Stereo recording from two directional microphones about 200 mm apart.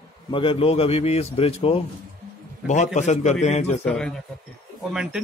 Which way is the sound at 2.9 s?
35° left (ahead or behind).